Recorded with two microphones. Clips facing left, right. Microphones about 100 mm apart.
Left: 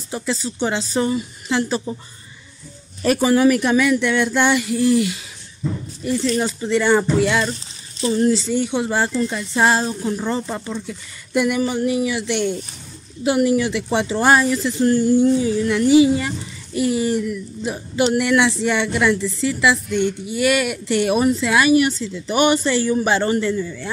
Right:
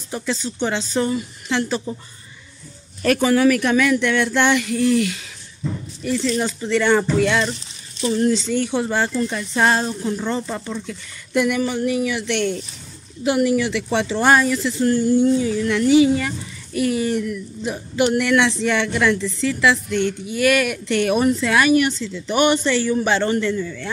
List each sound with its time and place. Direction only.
0.1 s speech: 10° left (ahead or behind)
3.0 s speech: 15° left (ahead or behind)
6.4 s speech: 10° left (ahead or behind)
13.2 s speech: 20° left (ahead or behind)
18.2 s speech: 5° left (ahead or behind)
20.2 s speech: 20° left (ahead or behind)